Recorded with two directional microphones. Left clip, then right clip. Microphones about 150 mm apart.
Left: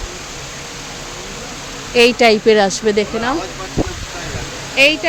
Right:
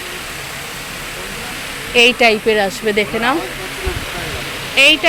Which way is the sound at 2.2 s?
60° left (ahead or behind).